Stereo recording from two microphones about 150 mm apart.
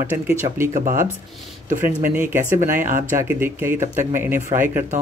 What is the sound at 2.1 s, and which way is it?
Speech, 15° right (ahead or behind).